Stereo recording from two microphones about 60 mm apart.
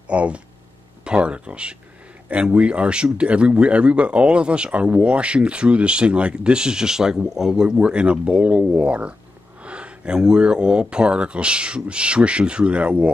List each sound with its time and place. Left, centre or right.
0.1 s speech: right